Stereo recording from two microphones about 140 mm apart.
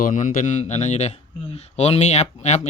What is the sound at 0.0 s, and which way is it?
A man's voice, 70° left (ahead or behind).